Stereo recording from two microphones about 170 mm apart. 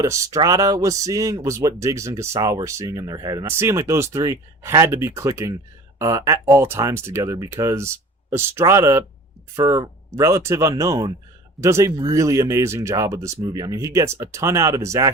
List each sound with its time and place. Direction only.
0.0 s speech: 20° right (ahead or behind)